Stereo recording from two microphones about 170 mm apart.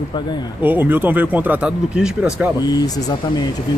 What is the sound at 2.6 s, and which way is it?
Speech, 20° left (ahead or behind).